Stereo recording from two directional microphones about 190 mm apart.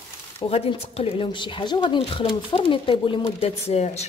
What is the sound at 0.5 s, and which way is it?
Speech, 30° left (ahead or behind).